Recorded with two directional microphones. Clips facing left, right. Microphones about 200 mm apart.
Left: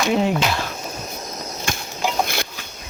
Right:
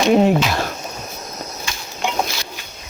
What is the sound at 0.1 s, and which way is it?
Speech, 50° right (ahead or behind).